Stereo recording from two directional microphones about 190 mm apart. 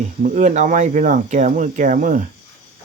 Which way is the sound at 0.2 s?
40° right (ahead or behind).